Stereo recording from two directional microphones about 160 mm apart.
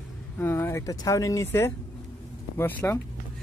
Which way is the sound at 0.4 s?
15° left (ahead or behind).